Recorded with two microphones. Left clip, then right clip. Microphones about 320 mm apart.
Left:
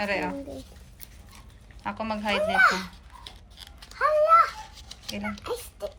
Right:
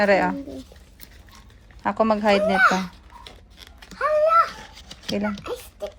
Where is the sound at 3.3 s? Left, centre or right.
Centre.